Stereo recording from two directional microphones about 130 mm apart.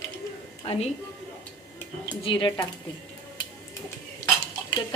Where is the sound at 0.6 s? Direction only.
55° left (ahead or behind).